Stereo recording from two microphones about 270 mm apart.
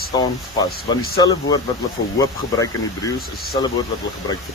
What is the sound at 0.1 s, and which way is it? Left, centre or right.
Speech, centre.